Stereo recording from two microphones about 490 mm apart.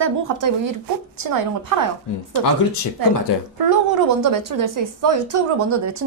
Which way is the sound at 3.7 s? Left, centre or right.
Right.